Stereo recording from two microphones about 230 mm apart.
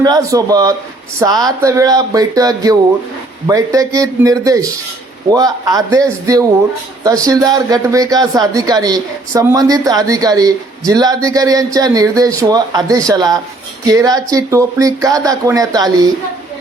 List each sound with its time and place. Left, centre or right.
0.0 s speech: centre